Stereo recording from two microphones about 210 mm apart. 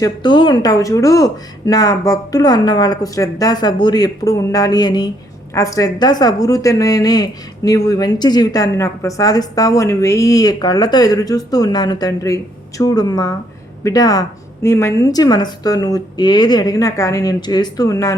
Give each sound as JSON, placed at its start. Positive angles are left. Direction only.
{"t": 0.0, "sound": "a woman's voice", "side_deg": 20}